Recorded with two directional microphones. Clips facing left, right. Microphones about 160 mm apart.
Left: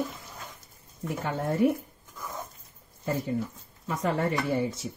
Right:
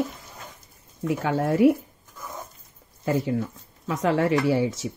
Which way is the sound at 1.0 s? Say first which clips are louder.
Right 6 dB; 90° right.